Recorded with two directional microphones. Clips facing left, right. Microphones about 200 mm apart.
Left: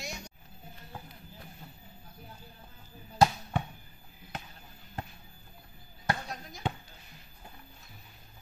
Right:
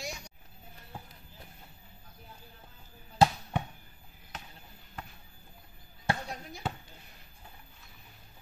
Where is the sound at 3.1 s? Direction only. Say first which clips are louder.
Even; 25° right (ahead or behind).